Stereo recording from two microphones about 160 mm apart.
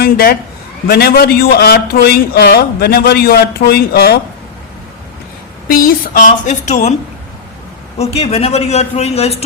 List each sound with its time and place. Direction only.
0.0 s a man's voice: 70° left (ahead or behind)
5.6 s a woman's voice: 65° left (ahead or behind); by 6.9 s 50° left (ahead or behind)
7.9 s a man's voice: 40° left (ahead or behind)